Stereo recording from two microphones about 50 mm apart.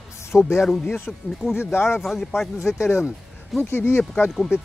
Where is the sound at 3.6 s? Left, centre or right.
Left.